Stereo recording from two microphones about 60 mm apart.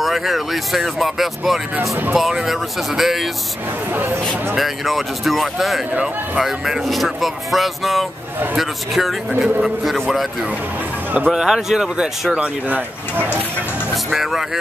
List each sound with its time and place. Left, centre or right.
0.0 s speech: centre
3.9 s speech: right
4.6 s speech: centre
11.3 s speech: centre
12.4 s speech: right
14.1 s speech: centre